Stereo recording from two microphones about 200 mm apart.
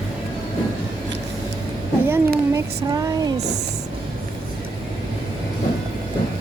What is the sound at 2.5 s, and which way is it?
Speech, 15° right (ahead or behind).